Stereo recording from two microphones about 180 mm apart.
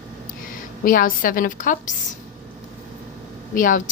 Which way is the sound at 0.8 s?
50° left (ahead or behind).